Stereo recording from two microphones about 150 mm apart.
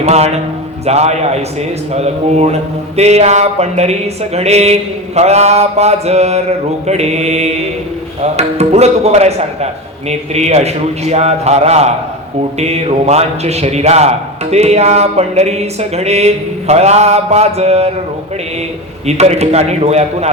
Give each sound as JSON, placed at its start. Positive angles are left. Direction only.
{"t": 0.0, "sound": "mantra", "side_deg": -45}
{"t": 19.0, "sound": "mantra", "side_deg": -45}